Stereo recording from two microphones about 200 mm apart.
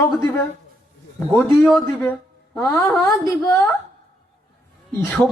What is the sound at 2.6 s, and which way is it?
Speech, 15° left (ahead or behind).